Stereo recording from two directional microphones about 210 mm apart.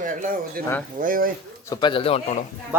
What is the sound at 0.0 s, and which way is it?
Speech, 40° right (ahead or behind).